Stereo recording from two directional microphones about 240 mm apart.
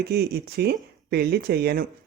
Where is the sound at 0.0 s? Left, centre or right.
Right.